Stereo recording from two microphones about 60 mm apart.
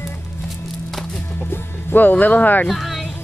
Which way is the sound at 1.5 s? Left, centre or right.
Left.